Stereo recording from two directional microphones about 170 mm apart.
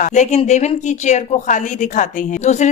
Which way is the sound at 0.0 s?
45° left (ahead or behind).